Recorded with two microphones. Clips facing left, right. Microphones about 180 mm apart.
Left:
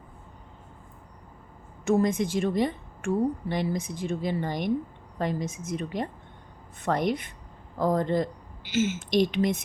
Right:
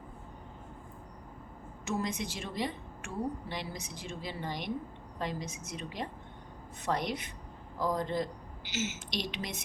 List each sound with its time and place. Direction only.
1.8 s a woman's voice: 50° left (ahead or behind)